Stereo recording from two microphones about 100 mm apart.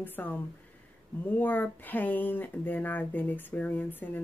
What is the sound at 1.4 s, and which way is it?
Speech, 20° left (ahead or behind).